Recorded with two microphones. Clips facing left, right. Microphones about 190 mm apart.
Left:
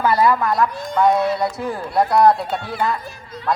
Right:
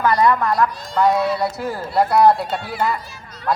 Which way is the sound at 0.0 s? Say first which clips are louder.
Even; 5° left (ahead or behind).